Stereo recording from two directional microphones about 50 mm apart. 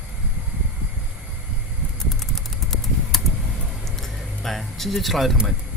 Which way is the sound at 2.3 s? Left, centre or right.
Centre.